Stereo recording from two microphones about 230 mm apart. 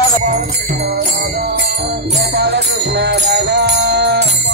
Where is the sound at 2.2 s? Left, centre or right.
Right.